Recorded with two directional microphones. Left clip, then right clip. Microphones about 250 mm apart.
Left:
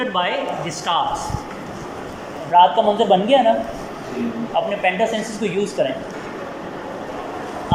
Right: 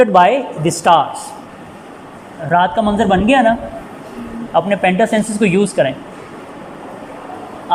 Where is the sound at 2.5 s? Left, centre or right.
Right.